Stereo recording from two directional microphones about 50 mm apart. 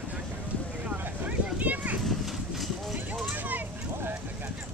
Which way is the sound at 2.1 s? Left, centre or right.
Centre.